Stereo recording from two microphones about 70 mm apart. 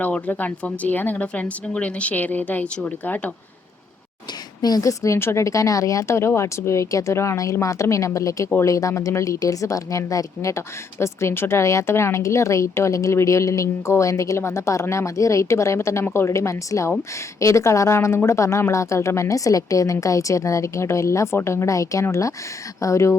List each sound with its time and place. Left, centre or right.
0.0 s speech: left
4.6 s a woman's voice: left